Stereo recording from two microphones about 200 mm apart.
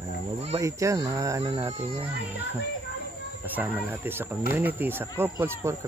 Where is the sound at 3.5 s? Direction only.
10° right (ahead or behind).